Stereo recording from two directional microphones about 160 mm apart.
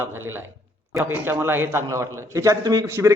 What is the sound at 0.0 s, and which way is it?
A man's voice, 15° right (ahead or behind).